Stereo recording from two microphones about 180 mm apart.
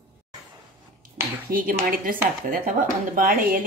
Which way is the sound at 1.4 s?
50° right (ahead or behind).